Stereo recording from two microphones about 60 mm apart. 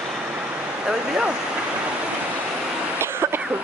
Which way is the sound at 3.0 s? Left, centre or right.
Right.